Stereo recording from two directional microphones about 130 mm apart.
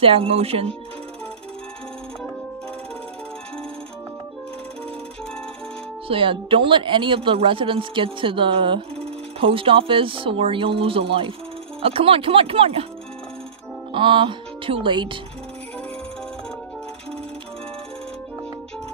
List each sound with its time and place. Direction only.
0.0 s speech: 45° right (ahead or behind)
6.0 s speech: 45° right (ahead or behind)
13.9 s speech: 40° right (ahead or behind)